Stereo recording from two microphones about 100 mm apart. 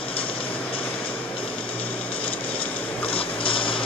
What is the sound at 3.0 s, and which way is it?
Mechanisms, 65° left (ahead or behind).